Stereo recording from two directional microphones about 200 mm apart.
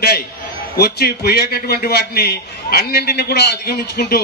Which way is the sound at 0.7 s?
50° left (ahead or behind).